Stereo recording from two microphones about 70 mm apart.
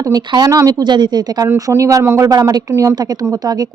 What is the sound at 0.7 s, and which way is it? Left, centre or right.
Speech, right.